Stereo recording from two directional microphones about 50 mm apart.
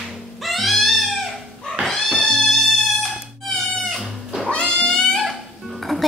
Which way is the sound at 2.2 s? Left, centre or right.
Centre.